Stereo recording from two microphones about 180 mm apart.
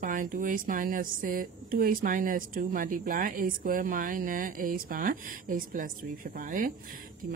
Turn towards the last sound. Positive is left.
turn(degrees=-50)  # may be behind; listen again after turning